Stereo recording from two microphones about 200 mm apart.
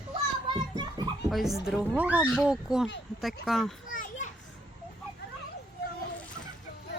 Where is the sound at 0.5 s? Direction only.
20° right (ahead or behind).